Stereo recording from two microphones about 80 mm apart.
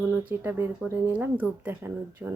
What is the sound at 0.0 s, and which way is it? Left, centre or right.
Speech, right.